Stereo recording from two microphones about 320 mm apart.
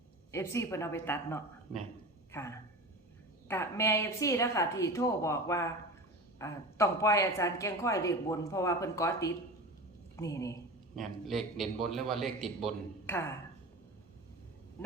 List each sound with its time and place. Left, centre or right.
0.3 s a man's voice: centre